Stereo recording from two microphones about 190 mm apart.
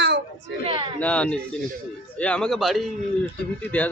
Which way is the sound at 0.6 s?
30° right (ahead or behind).